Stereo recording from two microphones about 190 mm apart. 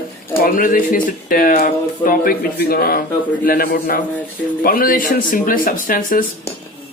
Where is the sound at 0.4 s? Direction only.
45° left (ahead or behind).